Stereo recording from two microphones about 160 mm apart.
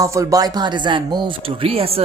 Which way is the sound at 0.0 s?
20° right (ahead or behind).